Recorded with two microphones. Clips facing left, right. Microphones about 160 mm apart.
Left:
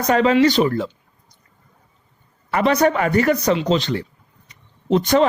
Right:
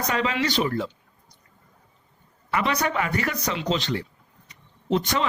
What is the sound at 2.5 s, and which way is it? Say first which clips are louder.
Speech: left 8 dB; 45° left (ahead or behind).